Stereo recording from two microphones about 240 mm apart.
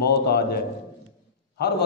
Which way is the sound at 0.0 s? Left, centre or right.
Left.